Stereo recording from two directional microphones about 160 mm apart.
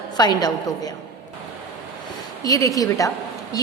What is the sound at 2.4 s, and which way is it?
Speech, 20° left (ahead or behind).